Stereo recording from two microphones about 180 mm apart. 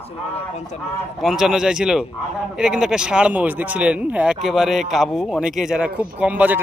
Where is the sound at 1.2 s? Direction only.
Centre (ahead or behind).